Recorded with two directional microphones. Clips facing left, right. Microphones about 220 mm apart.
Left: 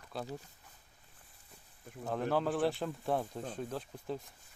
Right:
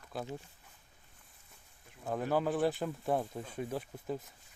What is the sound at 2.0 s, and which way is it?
Speech, 5° right (ahead or behind).